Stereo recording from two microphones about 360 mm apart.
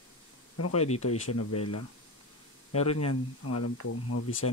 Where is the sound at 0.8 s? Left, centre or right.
Left.